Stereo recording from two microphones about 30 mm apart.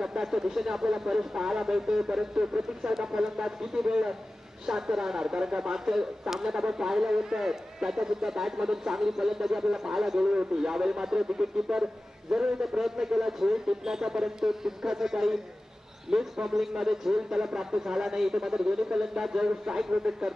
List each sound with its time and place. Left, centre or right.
0.2 s a man's voice: centre